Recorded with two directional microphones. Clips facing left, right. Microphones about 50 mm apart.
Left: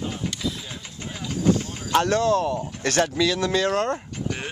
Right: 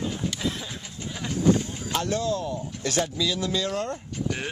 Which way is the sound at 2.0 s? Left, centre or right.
Left.